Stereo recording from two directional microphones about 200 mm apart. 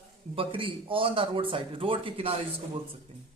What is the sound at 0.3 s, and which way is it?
A man's voice, 25° right (ahead or behind).